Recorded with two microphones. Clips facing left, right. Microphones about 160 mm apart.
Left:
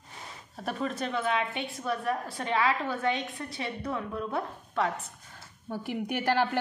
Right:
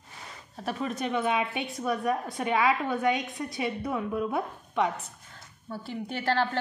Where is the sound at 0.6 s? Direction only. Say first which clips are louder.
Right 1 dB; 5° right (ahead or behind).